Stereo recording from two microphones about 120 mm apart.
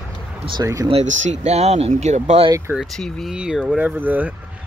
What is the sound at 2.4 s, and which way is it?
Speech, 25° right (ahead or behind).